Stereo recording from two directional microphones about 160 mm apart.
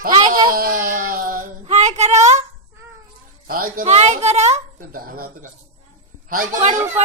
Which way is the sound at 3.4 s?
65° right (ahead or behind).